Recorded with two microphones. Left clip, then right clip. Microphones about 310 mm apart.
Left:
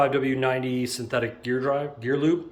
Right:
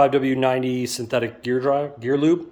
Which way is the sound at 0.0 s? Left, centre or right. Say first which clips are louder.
Right 5 dB; right.